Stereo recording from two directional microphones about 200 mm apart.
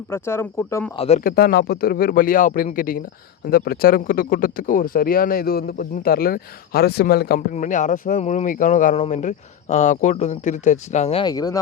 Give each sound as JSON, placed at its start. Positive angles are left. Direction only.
{"t": 0.1, "sound": "speech", "side_deg": 10}
{"t": 0.9, "sound": "speech", "side_deg": 30}
{"t": 1.2, "sound": "speech", "side_deg": 50}
{"t": 7.5, "sound": "speech", "side_deg": 40}